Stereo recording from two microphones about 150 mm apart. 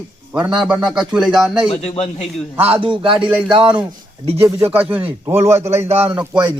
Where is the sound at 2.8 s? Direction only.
35° right (ahead or behind).